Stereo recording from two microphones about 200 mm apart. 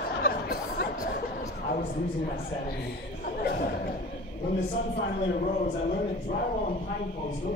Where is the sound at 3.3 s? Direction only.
50° left (ahead or behind).